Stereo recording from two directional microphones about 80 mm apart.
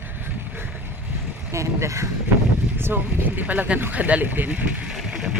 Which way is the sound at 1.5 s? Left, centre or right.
Right.